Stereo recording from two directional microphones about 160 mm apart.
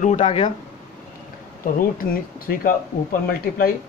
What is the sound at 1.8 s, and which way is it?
Speech, 65° left (ahead or behind).